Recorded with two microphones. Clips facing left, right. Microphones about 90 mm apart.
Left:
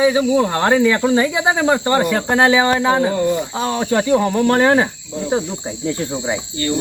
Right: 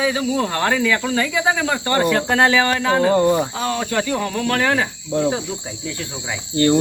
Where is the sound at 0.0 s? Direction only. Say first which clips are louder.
Left 6 dB; 15° left (ahead or behind).